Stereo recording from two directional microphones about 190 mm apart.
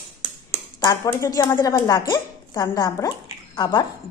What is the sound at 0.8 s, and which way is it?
Speech, 20° left (ahead or behind).